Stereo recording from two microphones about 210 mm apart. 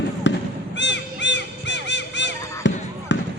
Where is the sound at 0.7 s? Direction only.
60° left (ahead or behind).